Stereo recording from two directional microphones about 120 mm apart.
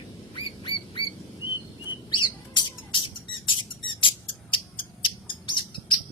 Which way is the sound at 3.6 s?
45° left (ahead or behind).